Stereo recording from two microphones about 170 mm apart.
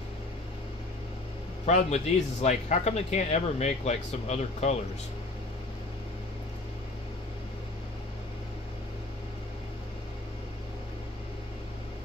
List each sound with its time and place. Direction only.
1.7 s speech: 40° left (ahead or behind)